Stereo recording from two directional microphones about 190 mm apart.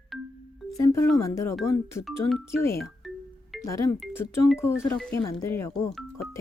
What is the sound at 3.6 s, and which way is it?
Speech, 15° left (ahead or behind).